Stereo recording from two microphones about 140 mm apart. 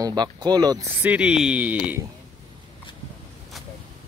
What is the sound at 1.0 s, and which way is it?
Speech, 10° right (ahead or behind).